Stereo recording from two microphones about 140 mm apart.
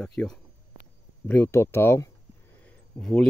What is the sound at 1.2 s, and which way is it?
Speech, 15° left (ahead or behind).